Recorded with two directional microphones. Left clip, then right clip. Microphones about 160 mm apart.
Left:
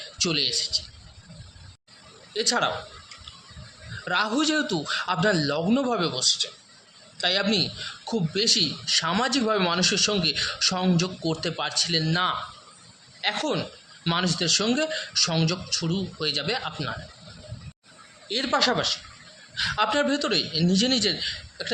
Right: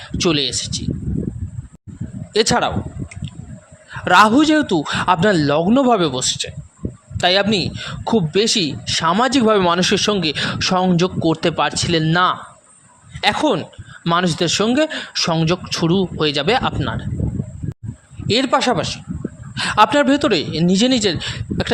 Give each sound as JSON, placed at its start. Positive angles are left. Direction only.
{"t": 0.2, "sound": "speech", "side_deg": -50}
{"t": 2.3, "sound": "a man's voice", "side_deg": -65}
{"t": 4.0, "sound": "a man's voice", "side_deg": -85}
{"t": 4.4, "sound": "a man's voice", "side_deg": -50}
{"t": 18.3, "sound": "a man's voice", "side_deg": -60}
{"t": 19.5, "sound": "a man's voice", "side_deg": -65}